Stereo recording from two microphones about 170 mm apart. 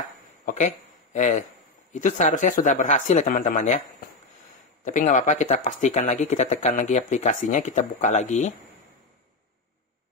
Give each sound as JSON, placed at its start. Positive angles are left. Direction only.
{"t": 0.5, "sound": "a sound", "side_deg": 45}
{"t": 1.9, "sound": "speech", "side_deg": 45}
{"t": 4.8, "sound": "speech", "side_deg": 45}